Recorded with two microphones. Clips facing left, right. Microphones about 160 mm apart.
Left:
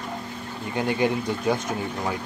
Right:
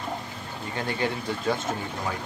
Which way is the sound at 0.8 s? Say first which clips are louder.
Left 6 dB; 15° left (ahead or behind).